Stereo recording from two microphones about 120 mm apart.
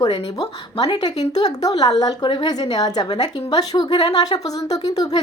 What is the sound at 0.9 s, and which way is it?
A woman's voice, 35° left (ahead or behind).